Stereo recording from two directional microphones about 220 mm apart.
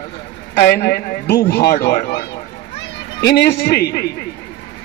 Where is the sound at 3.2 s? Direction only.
50° left (ahead or behind).